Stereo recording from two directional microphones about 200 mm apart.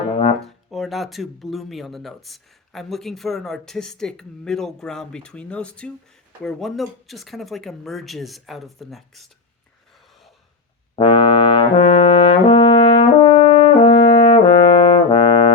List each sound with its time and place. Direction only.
0.1 s brass instrument: 30° left (ahead or behind)
0.4 s speech: centre (ahead or behind)
10.9 s brass instrument: 25° left (ahead or behind)